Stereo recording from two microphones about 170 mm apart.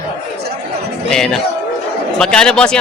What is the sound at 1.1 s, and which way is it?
Speech, 5° left (ahead or behind).